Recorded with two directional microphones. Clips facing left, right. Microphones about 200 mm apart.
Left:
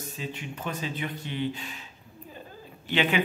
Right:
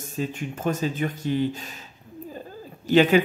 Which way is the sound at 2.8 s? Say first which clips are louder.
Right 9 dB; 40° right (ahead or behind).